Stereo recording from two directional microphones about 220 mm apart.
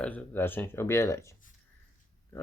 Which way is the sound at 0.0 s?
5° left (ahead or behind).